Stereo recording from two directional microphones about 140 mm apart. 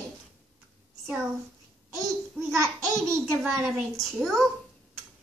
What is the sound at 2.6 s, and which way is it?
Babbling, 25° right (ahead or behind).